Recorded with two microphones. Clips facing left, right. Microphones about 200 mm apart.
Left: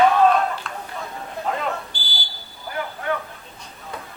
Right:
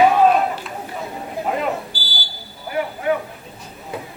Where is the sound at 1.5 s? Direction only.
15° right (ahead or behind).